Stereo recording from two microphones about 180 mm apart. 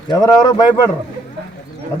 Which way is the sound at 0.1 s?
20° left (ahead or behind).